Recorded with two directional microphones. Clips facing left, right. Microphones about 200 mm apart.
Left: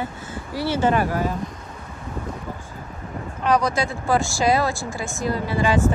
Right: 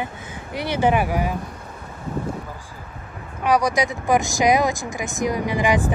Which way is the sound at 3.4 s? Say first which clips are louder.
Right 1 dB; 15° right (ahead or behind).